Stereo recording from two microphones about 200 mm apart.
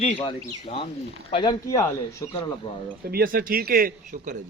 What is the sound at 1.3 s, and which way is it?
Speech, 25° left (ahead or behind).